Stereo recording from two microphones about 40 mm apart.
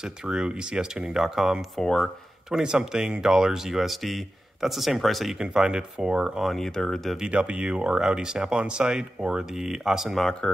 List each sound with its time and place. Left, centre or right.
0.0 s speech: centre
1.1 s speech: centre
1.8 s speech: centre
2.5 s speech: centre
5.4 s speech: right
6.4 s speech: centre
7.2 s speech: right; by 10.1 s centre
10.4 s speech: left